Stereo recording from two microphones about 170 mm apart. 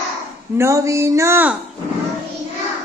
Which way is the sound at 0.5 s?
15° right (ahead or behind).